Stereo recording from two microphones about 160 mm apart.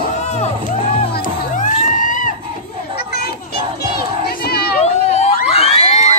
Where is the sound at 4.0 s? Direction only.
75° left (ahead or behind).